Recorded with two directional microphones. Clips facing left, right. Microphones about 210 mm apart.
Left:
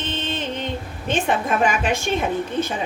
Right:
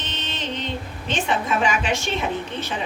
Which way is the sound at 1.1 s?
55° left (ahead or behind).